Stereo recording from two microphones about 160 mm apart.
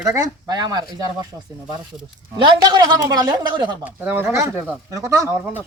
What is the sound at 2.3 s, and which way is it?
A man's voice, 25° right (ahead or behind).